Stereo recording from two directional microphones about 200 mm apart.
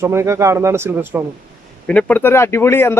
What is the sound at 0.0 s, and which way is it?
A man's voice, 15° right (ahead or behind).